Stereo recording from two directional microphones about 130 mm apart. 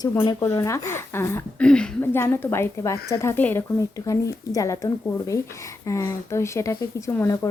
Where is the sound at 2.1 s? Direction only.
20° left (ahead or behind).